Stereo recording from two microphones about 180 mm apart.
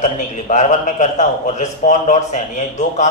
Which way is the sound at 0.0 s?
40° left (ahead or behind).